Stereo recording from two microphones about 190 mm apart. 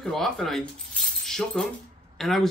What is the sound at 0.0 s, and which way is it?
Speech, centre (ahead or behind).